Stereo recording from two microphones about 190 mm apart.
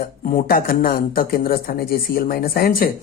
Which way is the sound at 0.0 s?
50° left (ahead or behind).